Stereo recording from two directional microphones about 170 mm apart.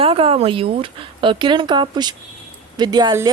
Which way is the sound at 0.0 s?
35° right (ahead or behind).